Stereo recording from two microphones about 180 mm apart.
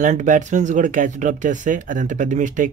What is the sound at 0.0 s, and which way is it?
Speech, 45° right (ahead or behind).